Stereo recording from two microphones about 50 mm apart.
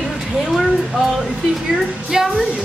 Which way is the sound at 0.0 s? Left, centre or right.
Centre.